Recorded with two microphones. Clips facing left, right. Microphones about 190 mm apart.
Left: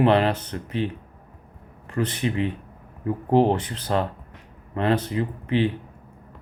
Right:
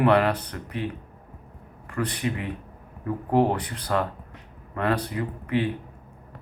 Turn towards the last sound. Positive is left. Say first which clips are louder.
# left 3 dB
turn(degrees=25)  # may be behind; listen again after turning